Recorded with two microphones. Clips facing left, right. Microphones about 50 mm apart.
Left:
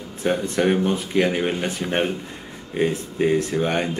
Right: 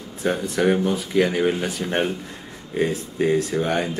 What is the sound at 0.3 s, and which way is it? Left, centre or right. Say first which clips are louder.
Speech: even; centre.